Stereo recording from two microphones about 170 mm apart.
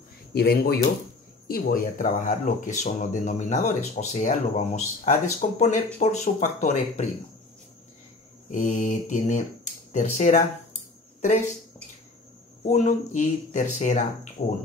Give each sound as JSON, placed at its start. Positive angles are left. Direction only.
{"t": 0.3, "sound": "speech", "side_deg": 65}
{"t": 1.5, "sound": "speech", "side_deg": 55}
{"t": 8.5, "sound": "speech", "side_deg": 50}
{"t": 12.6, "sound": "speech", "side_deg": 45}